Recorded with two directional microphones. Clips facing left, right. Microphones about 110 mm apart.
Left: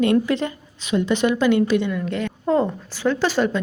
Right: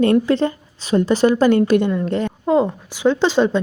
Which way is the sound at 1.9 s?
35° right (ahead or behind).